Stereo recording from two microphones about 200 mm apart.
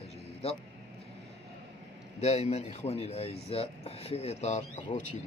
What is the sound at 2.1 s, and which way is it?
Speech, 35° left (ahead or behind).